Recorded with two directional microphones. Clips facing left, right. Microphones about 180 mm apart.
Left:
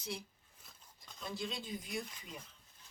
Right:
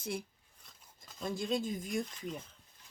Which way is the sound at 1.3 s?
45° right (ahead or behind).